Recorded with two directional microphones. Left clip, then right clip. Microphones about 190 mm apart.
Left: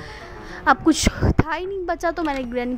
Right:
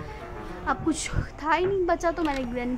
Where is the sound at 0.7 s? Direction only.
35° left (ahead or behind).